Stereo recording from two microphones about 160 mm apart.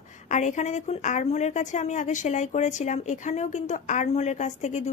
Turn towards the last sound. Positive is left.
turn(degrees=50)  # may be behind; listen again after turning